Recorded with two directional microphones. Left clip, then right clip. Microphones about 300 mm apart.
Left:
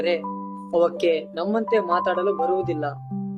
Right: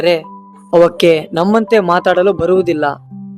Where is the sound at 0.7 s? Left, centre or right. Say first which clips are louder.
Right 11 dB; right.